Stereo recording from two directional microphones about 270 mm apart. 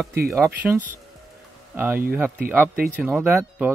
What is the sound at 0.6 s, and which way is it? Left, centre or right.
Speech, centre.